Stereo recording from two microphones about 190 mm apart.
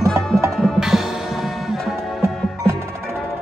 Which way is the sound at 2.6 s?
15° right (ahead or behind).